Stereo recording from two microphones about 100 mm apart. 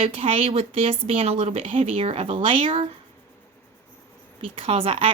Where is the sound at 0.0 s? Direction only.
70° right (ahead or behind).